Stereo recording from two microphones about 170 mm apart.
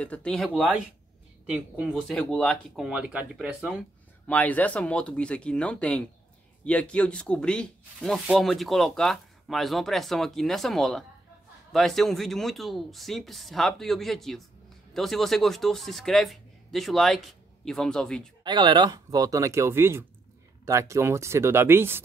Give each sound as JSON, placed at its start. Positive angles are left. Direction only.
{"t": 0.0, "sound": "speech", "side_deg": 5}
{"t": 18.4, "sound": "speech", "side_deg": -25}